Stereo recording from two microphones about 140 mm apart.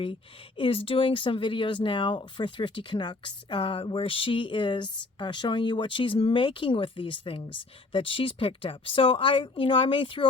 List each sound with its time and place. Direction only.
0.0 s speech: 40° left (ahead or behind)